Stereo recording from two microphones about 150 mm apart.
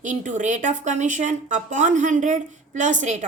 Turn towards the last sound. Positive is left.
turn(degrees=-55)  # may be behind; listen again after turning